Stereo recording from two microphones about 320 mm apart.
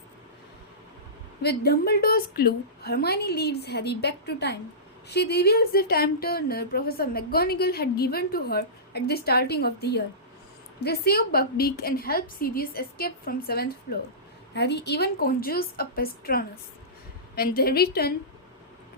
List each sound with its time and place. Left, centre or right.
1.4 s speech: left